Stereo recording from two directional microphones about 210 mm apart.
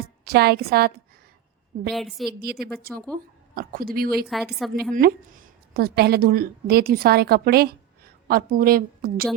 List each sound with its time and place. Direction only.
0.3 s speech: 50° right (ahead or behind)
1.9 s a woman's voice: centre (ahead or behind)
2.4 s speech: 45° right (ahead or behind)
4.3 s a woman's voice: centre (ahead or behind)
4.9 s a woman's voice: 45° right (ahead or behind)